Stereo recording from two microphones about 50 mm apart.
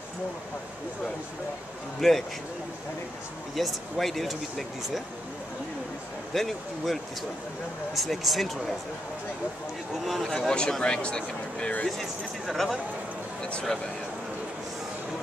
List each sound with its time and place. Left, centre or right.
2.0 s speech: centre
3.5 s speech: centre
6.3 s speech: centre
10.0 s speech: centre
10.8 s speech: centre
12.0 s speech: centre
13.4 s a sound: left